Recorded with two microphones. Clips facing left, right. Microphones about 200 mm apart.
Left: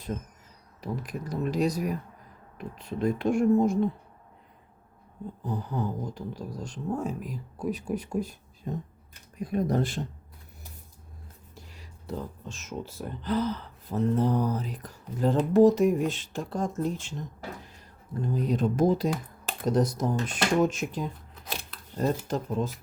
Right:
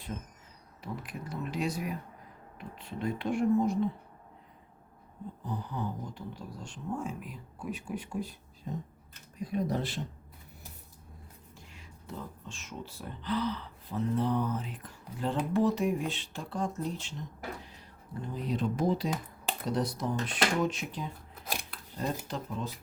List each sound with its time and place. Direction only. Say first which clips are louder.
0.8 s speech: left 6 dB; 40° left (ahead or behind)
5.5 s speech: left 5 dB; 45° left (ahead or behind)
8.7 s speech: left 4 dB; 55° left (ahead or behind)
11.5 s speech: left 5 dB; 35° left (ahead or behind)
18.3 s speech: left 6 dB; 45° left (ahead or behind)